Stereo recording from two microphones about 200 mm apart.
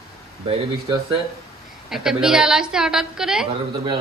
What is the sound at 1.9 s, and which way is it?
A woman's voice, 5° right (ahead or behind).